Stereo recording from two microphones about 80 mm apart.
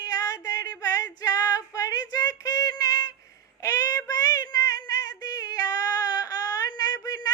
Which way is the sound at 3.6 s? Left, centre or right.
Left.